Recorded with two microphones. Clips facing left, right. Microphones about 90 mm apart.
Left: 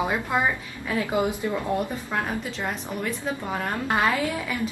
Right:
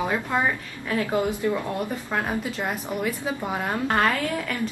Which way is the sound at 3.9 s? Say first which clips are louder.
Even; 5° left (ahead or behind).